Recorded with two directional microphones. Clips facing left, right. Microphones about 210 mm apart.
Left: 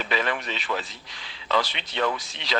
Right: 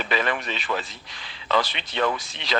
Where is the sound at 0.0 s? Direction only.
55° right (ahead or behind).